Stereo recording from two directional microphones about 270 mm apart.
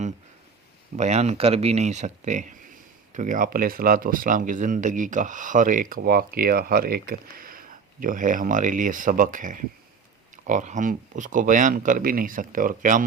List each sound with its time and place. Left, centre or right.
0.9 s speech: right